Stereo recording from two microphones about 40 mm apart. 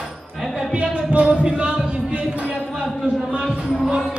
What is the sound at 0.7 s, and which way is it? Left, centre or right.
Music, right.